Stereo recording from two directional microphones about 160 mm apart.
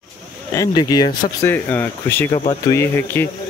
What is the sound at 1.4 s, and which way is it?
Speech, 10° left (ahead or behind).